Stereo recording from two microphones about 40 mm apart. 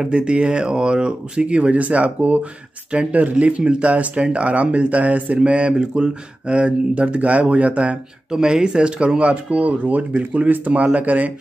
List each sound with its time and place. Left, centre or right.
0.0 s speech: right
8.3 s speech: centre
9.3 s speech: right